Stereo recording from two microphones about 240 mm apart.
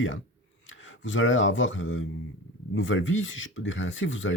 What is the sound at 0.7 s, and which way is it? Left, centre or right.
Speech, left.